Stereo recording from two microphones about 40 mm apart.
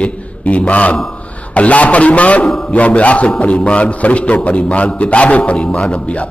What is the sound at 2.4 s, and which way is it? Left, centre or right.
Speech, centre.